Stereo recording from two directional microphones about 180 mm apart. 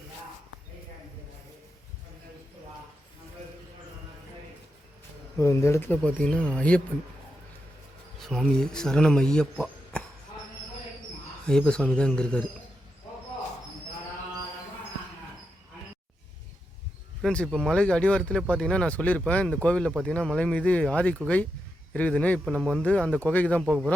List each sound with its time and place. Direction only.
5.4 s speech: 15° left (ahead or behind)
8.2 s speech: centre (ahead or behind)
11.4 s speech: 5° left (ahead or behind)
17.2 s speech: 5° left (ahead or behind)
22.5 s speech: 5° right (ahead or behind)
22.8 s speech: 5° left (ahead or behind)